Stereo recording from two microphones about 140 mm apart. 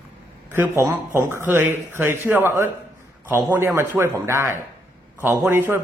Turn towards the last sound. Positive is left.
turn(degrees=-15)  # may be behind; listen again after turning